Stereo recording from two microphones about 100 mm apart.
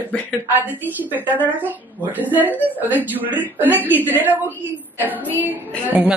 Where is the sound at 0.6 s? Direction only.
15° right (ahead or behind).